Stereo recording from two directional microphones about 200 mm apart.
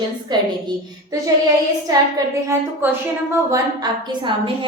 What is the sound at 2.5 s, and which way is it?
A woman's voice, 15° right (ahead or behind).